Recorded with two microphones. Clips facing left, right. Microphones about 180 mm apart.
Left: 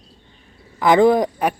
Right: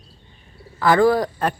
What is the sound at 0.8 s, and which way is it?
Speech, 20° left (ahead or behind).